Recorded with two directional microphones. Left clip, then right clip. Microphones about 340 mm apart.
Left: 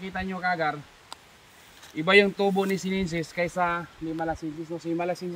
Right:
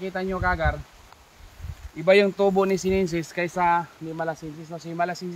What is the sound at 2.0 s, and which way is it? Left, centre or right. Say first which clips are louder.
Speech: right 2 dB; centre.